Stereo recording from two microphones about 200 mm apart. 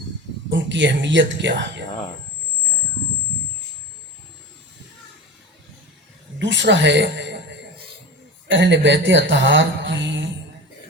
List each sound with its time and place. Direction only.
0.5 s speech: 65° right (ahead or behind)
6.4 s speech: 65° right (ahead or behind)
8.4 s speech: 65° right (ahead or behind)